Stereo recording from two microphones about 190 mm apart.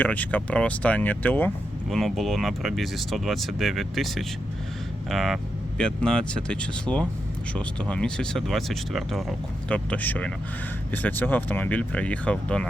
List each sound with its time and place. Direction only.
0.0 s speech: 10° left (ahead or behind)